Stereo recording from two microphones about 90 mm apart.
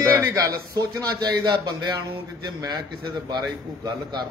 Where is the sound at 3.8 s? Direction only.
55° right (ahead or behind).